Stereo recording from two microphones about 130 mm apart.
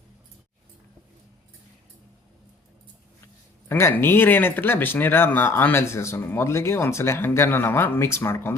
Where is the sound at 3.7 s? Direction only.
15° left (ahead or behind).